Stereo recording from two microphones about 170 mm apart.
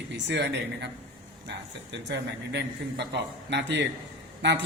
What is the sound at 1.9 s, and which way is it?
A man's voice, 90° right.